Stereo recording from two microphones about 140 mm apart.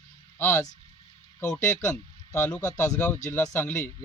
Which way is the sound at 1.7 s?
20° left (ahead or behind).